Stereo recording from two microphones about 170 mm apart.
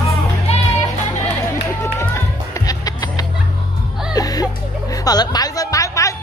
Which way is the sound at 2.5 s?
20° left (ahead or behind).